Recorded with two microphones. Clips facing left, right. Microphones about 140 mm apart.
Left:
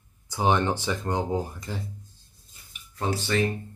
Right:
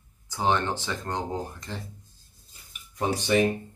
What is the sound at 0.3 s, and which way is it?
Speech, 15° left (ahead or behind).